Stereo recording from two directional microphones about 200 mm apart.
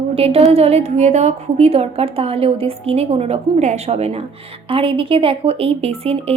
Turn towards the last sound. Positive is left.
turn(degrees=-30)  # may be behind; listen again after turning